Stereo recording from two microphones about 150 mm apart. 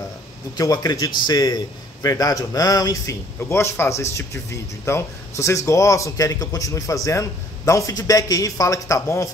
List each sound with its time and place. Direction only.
0.6 s a man's voice: 25° left (ahead or behind)